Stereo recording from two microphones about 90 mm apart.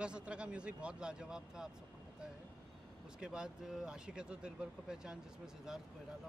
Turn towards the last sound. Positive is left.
turn(degrees=-5)  # may be behind; listen again after turning